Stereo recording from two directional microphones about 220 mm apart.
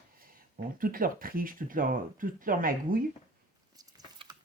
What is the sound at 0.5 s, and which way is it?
Speech, 40° right (ahead or behind).